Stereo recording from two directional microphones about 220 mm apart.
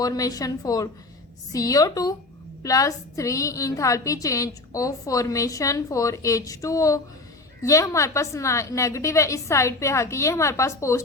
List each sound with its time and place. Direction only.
0.0 s a woman's voice: 15° left (ahead or behind)